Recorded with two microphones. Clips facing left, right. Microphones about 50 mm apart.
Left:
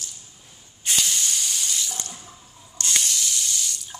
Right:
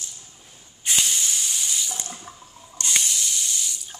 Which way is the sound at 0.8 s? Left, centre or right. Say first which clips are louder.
Even; centre.